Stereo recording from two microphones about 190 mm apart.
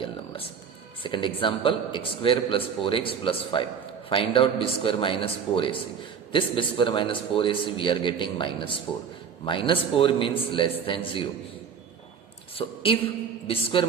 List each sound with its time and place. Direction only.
1.0 s a man's voice: 25° left (ahead or behind)
12.5 s a woman's voice: 30° left (ahead or behind)